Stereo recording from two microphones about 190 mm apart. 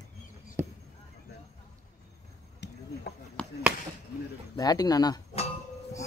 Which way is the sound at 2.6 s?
60° left (ahead or behind).